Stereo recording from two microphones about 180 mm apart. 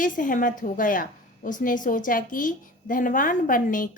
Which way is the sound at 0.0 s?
45° left (ahead or behind).